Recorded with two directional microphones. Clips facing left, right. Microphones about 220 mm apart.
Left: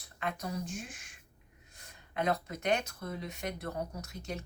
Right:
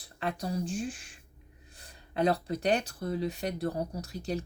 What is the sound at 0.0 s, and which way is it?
Speech, 30° right (ahead or behind).